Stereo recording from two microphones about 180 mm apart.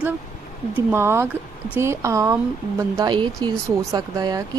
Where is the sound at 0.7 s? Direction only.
15° right (ahead or behind).